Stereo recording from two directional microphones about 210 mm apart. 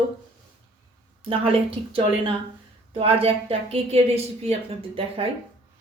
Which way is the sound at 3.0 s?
25° right (ahead or behind).